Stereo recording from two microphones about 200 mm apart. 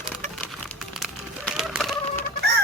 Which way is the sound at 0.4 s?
Centre (ahead or behind).